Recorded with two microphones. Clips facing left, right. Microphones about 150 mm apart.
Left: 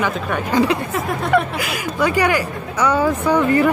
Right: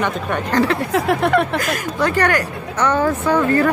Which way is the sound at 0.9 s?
75° right (ahead or behind).